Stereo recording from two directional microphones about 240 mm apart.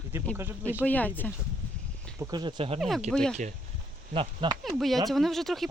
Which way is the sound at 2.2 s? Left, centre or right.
Centre.